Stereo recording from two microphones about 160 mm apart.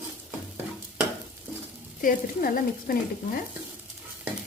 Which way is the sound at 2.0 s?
60° left (ahead or behind).